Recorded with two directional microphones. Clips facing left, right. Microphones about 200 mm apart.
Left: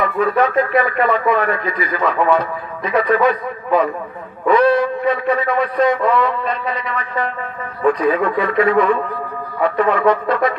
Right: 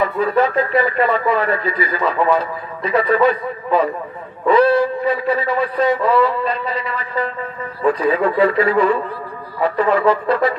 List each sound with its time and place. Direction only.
0.0 s speech: 30° right (ahead or behind)